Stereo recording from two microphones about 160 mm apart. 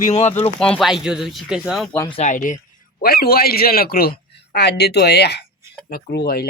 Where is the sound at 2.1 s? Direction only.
50° left (ahead or behind).